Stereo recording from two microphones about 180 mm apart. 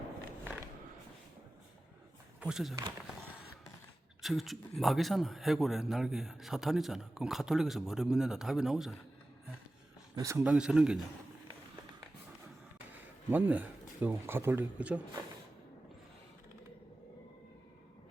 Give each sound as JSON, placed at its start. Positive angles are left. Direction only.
{"t": 2.4, "sound": "a man's voice", "side_deg": 0}
{"t": 4.2, "sound": "a man's voice", "side_deg": 0}
{"t": 10.2, "sound": "speech", "side_deg": -15}
{"t": 10.4, "sound": "a man's voice", "side_deg": -5}
{"t": 13.3, "sound": "speech", "side_deg": -10}